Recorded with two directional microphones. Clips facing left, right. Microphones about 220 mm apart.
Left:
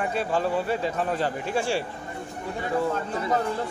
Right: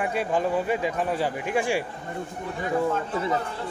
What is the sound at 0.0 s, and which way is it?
Speech, 15° right (ahead or behind).